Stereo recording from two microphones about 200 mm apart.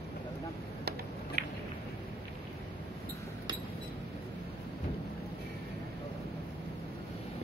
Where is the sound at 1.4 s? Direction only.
45° right (ahead or behind).